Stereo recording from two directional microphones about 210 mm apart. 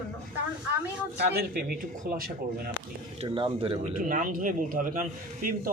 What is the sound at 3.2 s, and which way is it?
Speech, 25° right (ahead or behind).